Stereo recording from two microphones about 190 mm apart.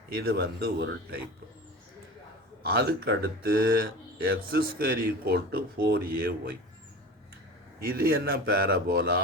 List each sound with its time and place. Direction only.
0.1 s speech: 55° right (ahead or behind)
2.6 s speech: 55° right (ahead or behind)
7.8 s speech: 50° right (ahead or behind)